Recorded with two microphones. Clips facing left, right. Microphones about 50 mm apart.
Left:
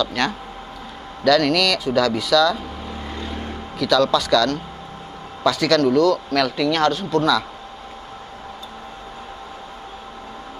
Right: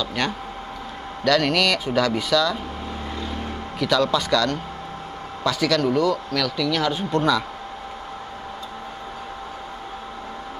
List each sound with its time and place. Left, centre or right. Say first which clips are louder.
0.0 s a man's voice: left 3 dB; centre
3.8 s a man's voice: left 3 dB; centre
6.4 s speech: left 3 dB; left
6.9 s speech: left 2 dB; right